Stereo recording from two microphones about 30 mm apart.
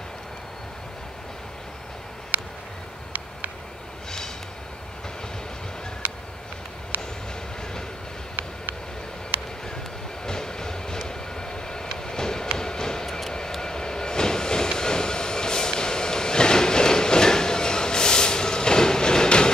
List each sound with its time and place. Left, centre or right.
6.0 s a sound: right
10.2 s vehicle: left
12.5 s train: left